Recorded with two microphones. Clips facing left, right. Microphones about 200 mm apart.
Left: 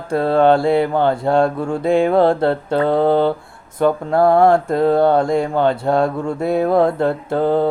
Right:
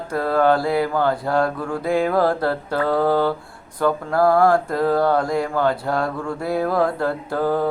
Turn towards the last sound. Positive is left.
turn(degrees=25)  # may be behind; listen again after turning